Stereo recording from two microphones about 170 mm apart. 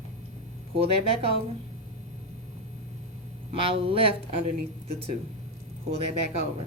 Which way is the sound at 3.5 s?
35° right (ahead or behind).